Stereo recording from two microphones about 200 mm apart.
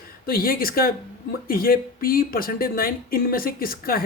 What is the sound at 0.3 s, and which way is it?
Speech, 50° left (ahead or behind).